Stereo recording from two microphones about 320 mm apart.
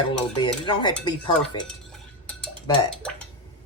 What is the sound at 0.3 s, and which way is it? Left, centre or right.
Cutlery, centre.